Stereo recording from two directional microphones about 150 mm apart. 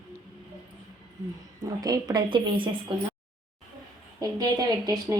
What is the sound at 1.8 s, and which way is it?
Speech, 25° right (ahead or behind).